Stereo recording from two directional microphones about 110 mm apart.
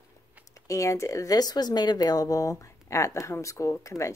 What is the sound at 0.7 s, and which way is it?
Speech, 30° left (ahead or behind).